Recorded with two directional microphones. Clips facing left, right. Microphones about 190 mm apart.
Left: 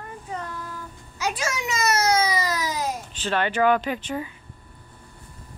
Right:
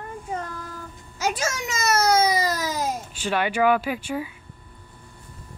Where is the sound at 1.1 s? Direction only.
45° right (ahead or behind).